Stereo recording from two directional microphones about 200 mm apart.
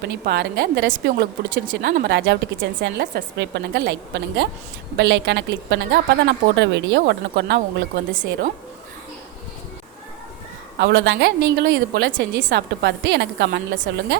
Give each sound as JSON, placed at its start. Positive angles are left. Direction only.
{"t": 0.0, "sound": "a woman's voice", "side_deg": -55}
{"t": 10.8, "sound": "a woman's voice", "side_deg": -65}